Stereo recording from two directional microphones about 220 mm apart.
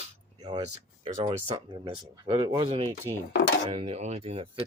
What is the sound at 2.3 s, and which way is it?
Speech, 15° right (ahead or behind).